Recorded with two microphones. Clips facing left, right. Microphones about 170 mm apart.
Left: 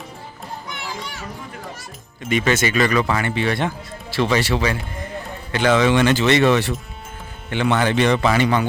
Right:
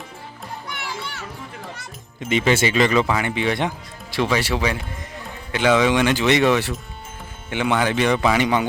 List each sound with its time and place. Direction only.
2.3 s speech: 15° right (ahead or behind)